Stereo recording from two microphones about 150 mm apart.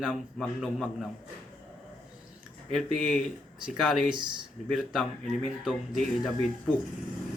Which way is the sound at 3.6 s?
5° right (ahead or behind).